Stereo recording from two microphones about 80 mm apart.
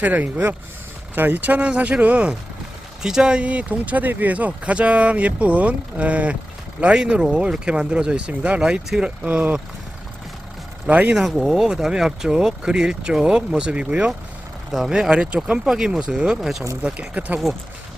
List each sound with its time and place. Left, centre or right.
0.0 s speech: centre
10.8 s speech: centre
11.1 s speech: centre
16.8 s speech: centre